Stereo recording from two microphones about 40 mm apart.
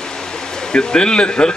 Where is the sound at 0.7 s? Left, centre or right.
Left.